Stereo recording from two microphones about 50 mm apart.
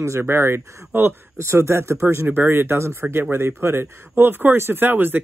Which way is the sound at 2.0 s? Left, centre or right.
Right.